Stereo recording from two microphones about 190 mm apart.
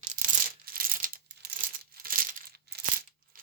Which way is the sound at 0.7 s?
50° right (ahead or behind).